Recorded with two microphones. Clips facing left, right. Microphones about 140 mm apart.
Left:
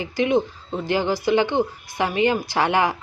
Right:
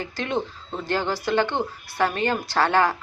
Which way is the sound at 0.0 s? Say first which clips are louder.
Left 7 dB; 10° left (ahead or behind).